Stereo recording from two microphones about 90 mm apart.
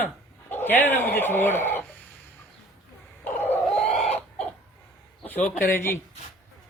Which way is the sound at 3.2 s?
20° left (ahead or behind).